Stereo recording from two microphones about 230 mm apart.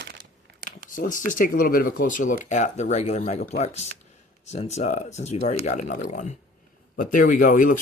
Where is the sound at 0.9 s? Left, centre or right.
Left.